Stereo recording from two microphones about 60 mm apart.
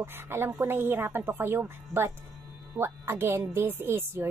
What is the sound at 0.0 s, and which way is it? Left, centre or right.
A woman's voice, right.